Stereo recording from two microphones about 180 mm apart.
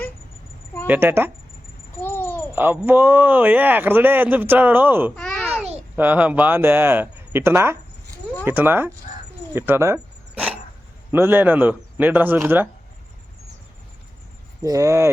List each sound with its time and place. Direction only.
0.9 s speech: 10° right (ahead or behind)
2.0 s a sound: 10° left (ahead or behind)
2.6 s speech: 10° right (ahead or behind)
5.1 s a sound: 5° left (ahead or behind)
6.0 s speech: 10° right (ahead or behind)
9.5 s zipper: 10° right (ahead or behind)
11.1 s speech: 10° right (ahead or behind)
14.6 s speech: 15° right (ahead or behind)